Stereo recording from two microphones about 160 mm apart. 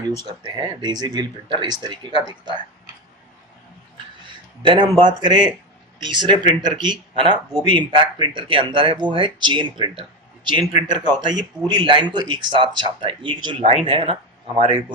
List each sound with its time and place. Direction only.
0.4 s speech: 25° right (ahead or behind)
4.6 s speech: 30° right (ahead or behind)